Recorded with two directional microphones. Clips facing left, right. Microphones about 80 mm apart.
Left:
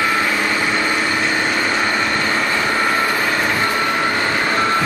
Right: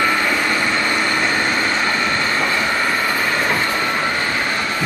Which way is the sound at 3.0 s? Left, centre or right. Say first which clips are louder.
Left 1 dB; centre.